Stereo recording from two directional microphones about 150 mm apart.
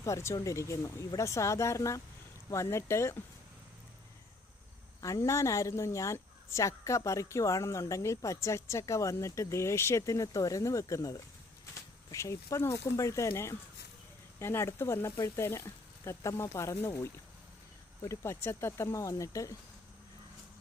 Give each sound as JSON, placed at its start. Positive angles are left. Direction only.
{"t": 0.0, "sound": "a woman's voice", "side_deg": 20}
{"t": 4.9, "sound": "a woman's voice", "side_deg": 20}